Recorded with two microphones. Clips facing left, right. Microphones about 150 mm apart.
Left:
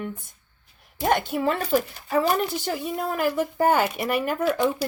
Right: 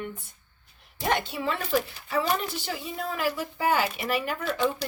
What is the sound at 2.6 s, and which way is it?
A woman's voice, 55° left (ahead or behind).